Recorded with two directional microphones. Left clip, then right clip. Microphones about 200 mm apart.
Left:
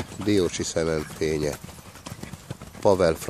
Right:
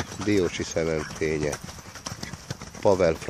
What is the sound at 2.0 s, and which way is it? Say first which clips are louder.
Clip-clop: right 3 dB; 50° right (ahead or behind).